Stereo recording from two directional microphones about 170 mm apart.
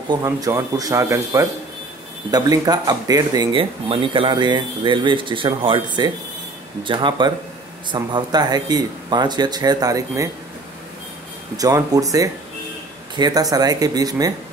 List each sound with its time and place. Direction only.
0.1 s speech: 20° right (ahead or behind)
11.5 s speech: 20° right (ahead or behind)